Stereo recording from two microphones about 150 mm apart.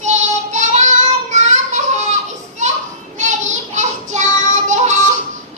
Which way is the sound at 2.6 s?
55° right (ahead or behind).